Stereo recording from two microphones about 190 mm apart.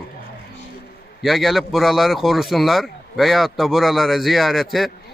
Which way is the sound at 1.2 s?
Centre (ahead or behind).